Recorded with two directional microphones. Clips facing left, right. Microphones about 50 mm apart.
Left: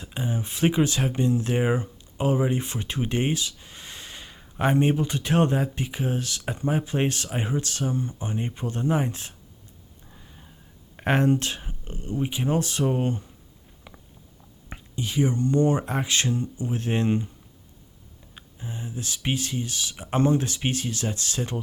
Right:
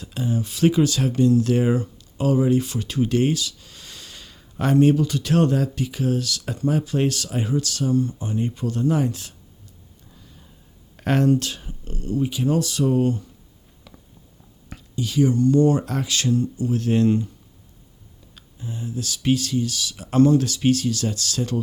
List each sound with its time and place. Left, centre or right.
0.0 s speech: left
10.1 s a sound: left
10.9 s speech: left
13.9 s a sound: left
14.7 s speech: left
18.3 s speech: left